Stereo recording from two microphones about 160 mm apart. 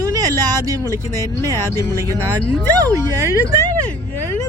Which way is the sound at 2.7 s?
20° right (ahead or behind).